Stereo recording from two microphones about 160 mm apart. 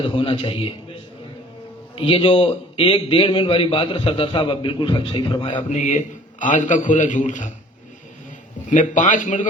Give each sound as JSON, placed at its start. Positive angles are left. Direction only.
{"t": 0.0, "sound": "a man's voice", "side_deg": 30}
{"t": 2.0, "sound": "a man's voice", "side_deg": 35}
{"t": 5.5, "sound": "a man's voice", "side_deg": 50}
{"t": 8.7, "sound": "a man's voice", "side_deg": 50}